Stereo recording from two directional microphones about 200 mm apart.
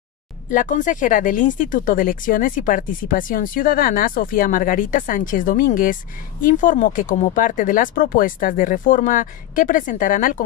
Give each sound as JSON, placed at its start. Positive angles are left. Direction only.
{"t": 0.5, "sound": "speech", "side_deg": 40}